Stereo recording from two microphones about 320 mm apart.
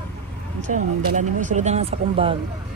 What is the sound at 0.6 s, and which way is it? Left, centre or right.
Speech, right.